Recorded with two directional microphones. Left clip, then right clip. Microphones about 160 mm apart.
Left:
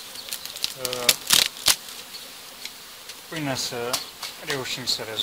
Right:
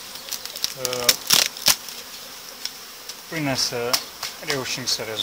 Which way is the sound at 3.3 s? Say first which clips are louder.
Right 4 dB; 30° left (ahead or behind).